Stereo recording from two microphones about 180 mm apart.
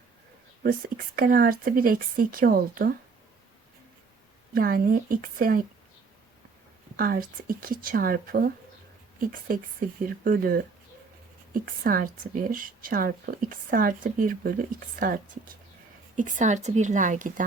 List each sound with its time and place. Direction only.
0.6 s speech: 55° right (ahead or behind)
4.5 s speech: 50° right (ahead or behind)
6.9 s speech: 55° right (ahead or behind)